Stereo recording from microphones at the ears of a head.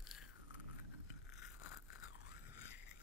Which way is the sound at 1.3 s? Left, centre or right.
Left.